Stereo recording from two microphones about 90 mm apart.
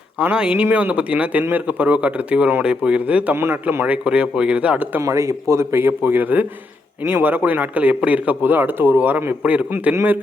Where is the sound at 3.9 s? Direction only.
15° right (ahead or behind).